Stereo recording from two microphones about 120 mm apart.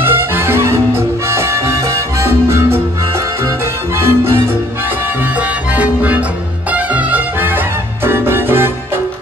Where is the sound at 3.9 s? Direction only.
20° right (ahead or behind).